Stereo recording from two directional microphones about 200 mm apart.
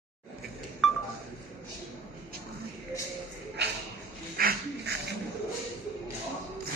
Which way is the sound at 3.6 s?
55° right (ahead or behind).